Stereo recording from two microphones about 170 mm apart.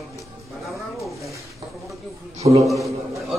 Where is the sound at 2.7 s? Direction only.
Centre (ahead or behind).